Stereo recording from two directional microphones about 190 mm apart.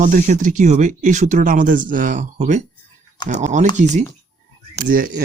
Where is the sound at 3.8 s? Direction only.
40° right (ahead or behind).